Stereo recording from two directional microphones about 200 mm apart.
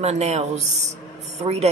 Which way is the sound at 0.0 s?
35° right (ahead or behind).